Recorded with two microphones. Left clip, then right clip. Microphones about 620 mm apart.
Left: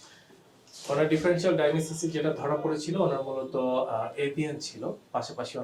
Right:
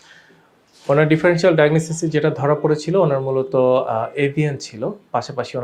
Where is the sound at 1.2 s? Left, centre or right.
Right.